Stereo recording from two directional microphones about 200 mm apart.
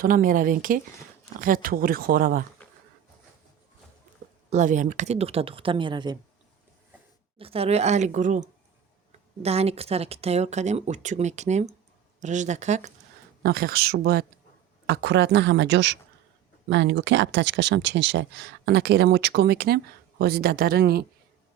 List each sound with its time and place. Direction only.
0.0 s speech: 45° right (ahead or behind)
4.5 s speech: 40° right (ahead or behind); by 6.1 s 25° right (ahead or behind)
7.3 s speech: 30° right (ahead or behind)
13.4 s speech: 50° right (ahead or behind)